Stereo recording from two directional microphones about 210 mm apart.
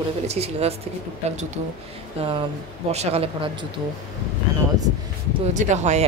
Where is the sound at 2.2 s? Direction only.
25° right (ahead or behind).